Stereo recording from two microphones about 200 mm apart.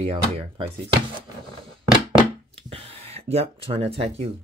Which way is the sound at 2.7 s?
30° right (ahead or behind).